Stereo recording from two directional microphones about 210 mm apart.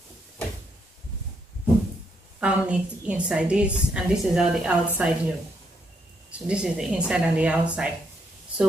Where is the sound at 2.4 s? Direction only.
5° right (ahead or behind).